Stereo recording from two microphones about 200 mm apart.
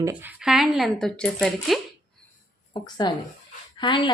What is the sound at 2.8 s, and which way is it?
Speech, 20° left (ahead or behind).